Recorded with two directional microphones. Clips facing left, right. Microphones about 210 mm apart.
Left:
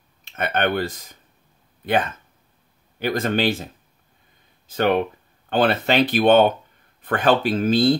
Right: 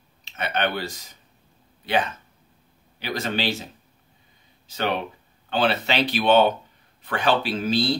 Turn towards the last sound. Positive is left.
turn(degrees=50)  # may be behind; listen again after turning